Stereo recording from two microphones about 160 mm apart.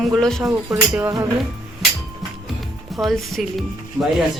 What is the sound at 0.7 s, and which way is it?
Speech, 20° right (ahead or behind).